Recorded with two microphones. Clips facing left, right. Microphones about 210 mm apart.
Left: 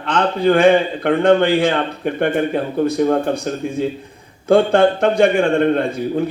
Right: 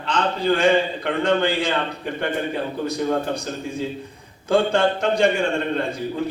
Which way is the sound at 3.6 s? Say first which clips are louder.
Left 6 dB; 55° left (ahead or behind).